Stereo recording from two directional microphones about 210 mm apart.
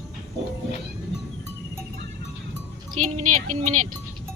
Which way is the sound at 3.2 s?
90° right.